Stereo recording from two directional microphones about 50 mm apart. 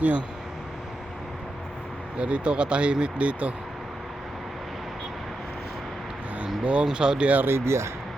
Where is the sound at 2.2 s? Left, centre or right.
Right.